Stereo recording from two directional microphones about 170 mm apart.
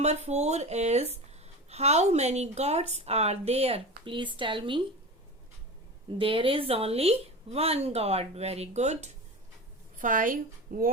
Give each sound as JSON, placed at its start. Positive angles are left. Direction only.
{"t": 0.0, "sound": "speech", "side_deg": -40}
{"t": 6.1, "sound": "a woman's voice", "side_deg": -30}